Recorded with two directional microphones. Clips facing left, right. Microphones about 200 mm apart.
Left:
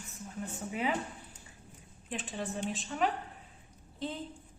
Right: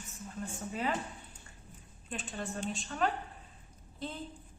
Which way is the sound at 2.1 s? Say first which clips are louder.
Left 2 dB; 20° left (ahead or behind).